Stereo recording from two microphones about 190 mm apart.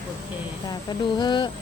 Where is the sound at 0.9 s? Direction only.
25° left (ahead or behind).